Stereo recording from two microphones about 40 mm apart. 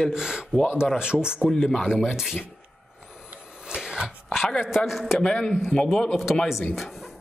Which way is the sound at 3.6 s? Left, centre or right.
Centre.